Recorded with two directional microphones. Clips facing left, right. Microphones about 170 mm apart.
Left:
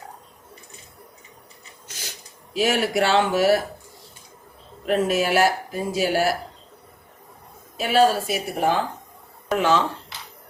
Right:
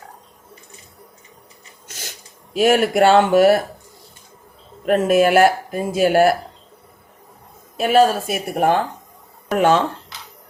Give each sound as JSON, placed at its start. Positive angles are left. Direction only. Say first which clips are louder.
{"t": 2.5, "sound": "speech", "louder": "right 6 dB", "side_deg": -50}
{"t": 4.9, "sound": "speech", "louder": "right 6 dB", "side_deg": -55}
{"t": 7.8, "sound": "speech", "louder": "right 4 dB", "side_deg": -50}